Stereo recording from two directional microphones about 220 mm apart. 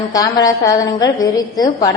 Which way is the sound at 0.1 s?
15° left (ahead or behind).